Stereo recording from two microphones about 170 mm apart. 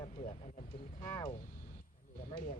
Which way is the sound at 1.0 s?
20° left (ahead or behind).